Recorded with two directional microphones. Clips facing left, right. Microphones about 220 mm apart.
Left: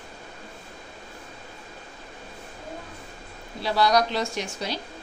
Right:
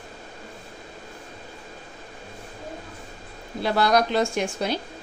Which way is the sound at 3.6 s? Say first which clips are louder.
Right 1 dB; 50° right (ahead or behind).